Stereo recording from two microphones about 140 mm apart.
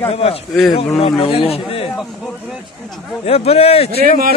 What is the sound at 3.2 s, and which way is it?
Speech, 45° left (ahead or behind).